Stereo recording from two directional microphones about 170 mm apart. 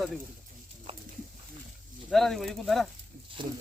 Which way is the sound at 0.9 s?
30° right (ahead or behind).